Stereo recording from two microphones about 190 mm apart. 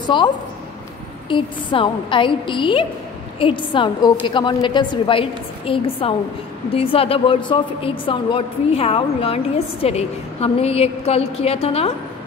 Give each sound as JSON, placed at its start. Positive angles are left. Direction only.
{"t": 0.0, "sound": "a woman's voice", "side_deg": 25}
{"t": 1.3, "sound": "a woman's voice", "side_deg": 25}